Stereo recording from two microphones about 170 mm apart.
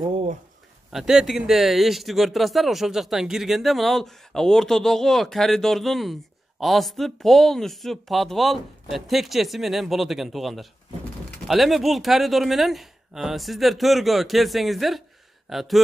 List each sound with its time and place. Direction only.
0.0 s speech: 35° right (ahead or behind)
0.9 s speech: 5° right (ahead or behind)